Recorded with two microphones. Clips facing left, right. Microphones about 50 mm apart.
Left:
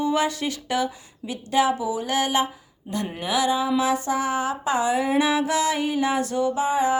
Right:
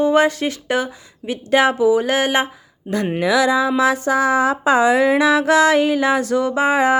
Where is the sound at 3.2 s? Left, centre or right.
Right.